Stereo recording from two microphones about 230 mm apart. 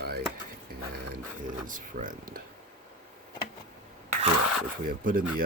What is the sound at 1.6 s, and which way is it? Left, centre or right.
Speech, right.